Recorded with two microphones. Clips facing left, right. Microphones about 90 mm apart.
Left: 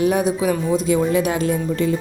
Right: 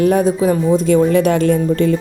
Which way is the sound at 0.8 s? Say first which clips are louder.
Right 6 dB; 55° right (ahead or behind).